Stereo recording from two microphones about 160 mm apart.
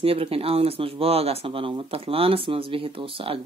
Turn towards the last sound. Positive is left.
turn(degrees=-35)  # may be behind; listen again after turning